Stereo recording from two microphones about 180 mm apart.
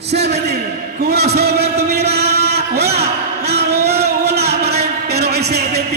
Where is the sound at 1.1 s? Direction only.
65° right (ahead or behind).